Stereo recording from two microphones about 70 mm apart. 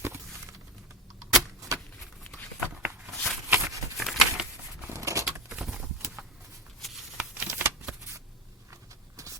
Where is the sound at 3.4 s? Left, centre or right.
Right.